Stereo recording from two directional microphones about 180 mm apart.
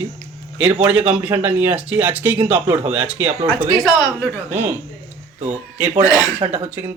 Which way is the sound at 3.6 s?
25° left (ahead or behind).